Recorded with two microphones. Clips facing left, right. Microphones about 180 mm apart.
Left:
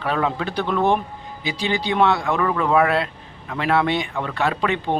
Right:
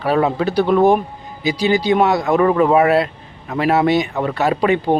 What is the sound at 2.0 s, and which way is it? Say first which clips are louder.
Speech: right 5 dB; 40° right (ahead or behind).